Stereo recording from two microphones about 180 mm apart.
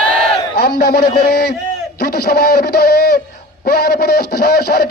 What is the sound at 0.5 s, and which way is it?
A man's voice, 65° left (ahead or behind).